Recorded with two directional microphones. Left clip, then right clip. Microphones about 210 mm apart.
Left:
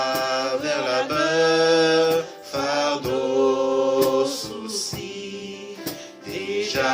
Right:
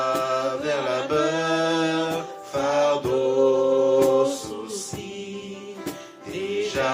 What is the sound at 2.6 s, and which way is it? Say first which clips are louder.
Music: right 2 dB; 30° left (ahead or behind).